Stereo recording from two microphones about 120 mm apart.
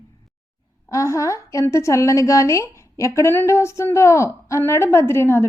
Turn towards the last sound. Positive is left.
turn(degrees=20)  # may be behind; listen again after turning